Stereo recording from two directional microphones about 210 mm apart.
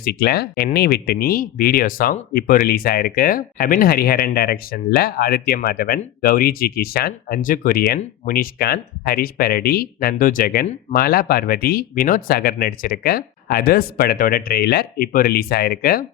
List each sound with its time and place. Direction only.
0.0 s speech: 50° left (ahead or behind)